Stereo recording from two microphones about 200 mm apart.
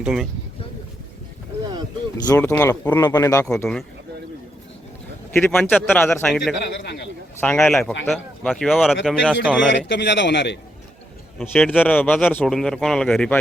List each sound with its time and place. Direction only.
0.0 s speech: 5° right (ahead or behind)
2.1 s speech: 15° left (ahead or behind)
3.4 s speech: 5° left (ahead or behind)
5.3 s speech: 5° left (ahead or behind)
6.8 s a man's voice: 55° left (ahead or behind)
7.3 s speech: 10° left (ahead or behind)
9.6 s a man's voice: 60° left (ahead or behind)
11.3 s speech: 5° left (ahead or behind)